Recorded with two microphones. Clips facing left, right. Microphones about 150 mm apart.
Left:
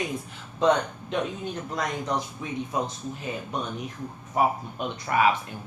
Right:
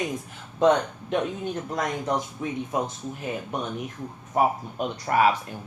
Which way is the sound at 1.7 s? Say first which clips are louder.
Right 1 dB; 50° right (ahead or behind).